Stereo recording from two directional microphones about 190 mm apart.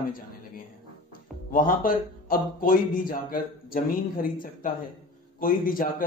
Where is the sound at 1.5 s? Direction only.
45° left (ahead or behind).